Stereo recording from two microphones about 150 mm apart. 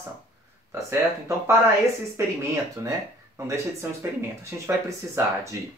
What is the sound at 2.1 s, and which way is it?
Speech, 20° right (ahead or behind).